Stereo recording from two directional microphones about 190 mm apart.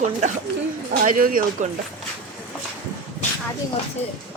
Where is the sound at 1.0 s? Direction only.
50° right (ahead or behind).